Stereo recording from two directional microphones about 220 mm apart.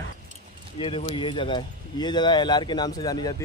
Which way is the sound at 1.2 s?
20° left (ahead or behind).